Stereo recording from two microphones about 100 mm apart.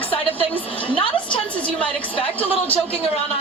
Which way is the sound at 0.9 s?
55° left (ahead or behind).